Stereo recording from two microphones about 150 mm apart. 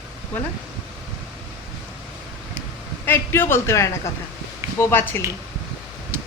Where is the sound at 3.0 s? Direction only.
15° left (ahead or behind).